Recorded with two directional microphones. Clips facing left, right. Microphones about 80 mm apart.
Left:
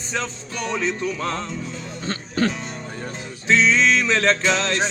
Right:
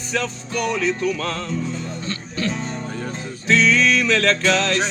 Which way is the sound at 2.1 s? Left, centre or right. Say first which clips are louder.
Left 5 dB; left.